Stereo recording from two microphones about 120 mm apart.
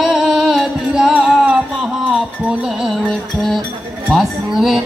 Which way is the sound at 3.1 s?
5° left (ahead or behind).